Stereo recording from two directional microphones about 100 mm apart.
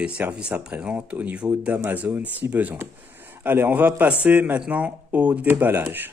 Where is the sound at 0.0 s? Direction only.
10° right (ahead or behind).